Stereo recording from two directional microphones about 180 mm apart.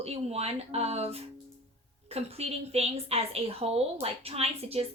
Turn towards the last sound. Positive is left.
turn(degrees=-35)  # may be behind; listen again after turning